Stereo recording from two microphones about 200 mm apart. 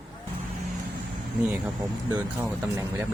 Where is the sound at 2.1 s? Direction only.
15° right (ahead or behind).